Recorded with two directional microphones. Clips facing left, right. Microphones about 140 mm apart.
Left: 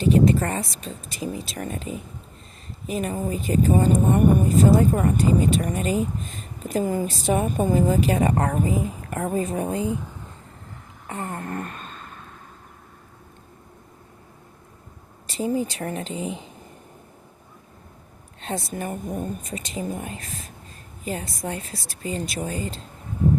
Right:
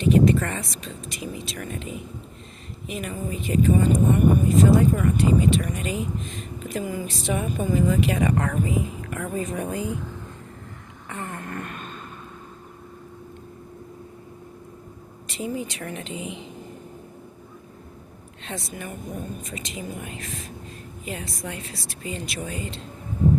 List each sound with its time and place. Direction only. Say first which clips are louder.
0.1 s speech: even; 35° left (ahead or behind)
11.1 s a sound: left 3 dB; 35° left (ahead or behind)
15.3 s speech: left 5 dB; 35° left (ahead or behind)
18.4 s speech: left 5 dB; 40° left (ahead or behind)